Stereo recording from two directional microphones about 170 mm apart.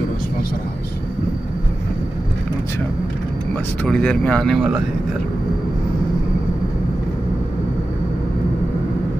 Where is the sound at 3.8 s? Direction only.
5° left (ahead or behind).